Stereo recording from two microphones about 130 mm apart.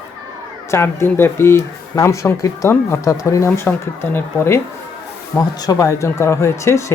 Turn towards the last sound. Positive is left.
turn(degrees=25)  # may be behind; listen again after turning